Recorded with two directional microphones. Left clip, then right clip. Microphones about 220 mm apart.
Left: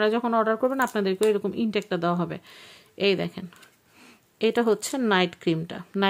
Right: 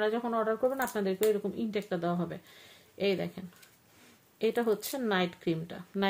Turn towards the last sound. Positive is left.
turn(degrees=35)  # may be behind; listen again after turning